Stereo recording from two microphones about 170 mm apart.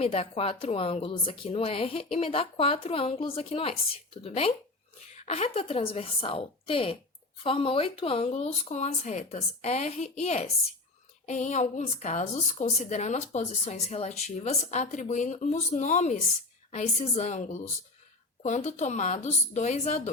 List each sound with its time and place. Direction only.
0.0 s a woman's voice: 35° left (ahead or behind)